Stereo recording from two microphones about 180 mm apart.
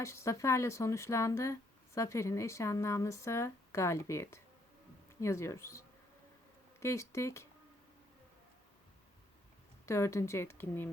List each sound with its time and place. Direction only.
0.0 s speech: 15° left (ahead or behind)
9.8 s speech: 15° left (ahead or behind)